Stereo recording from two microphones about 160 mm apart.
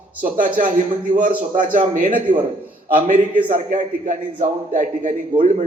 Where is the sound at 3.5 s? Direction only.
50° right (ahead or behind).